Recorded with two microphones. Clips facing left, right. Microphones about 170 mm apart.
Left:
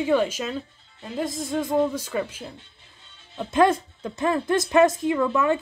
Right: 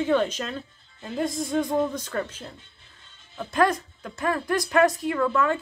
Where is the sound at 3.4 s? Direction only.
20° left (ahead or behind).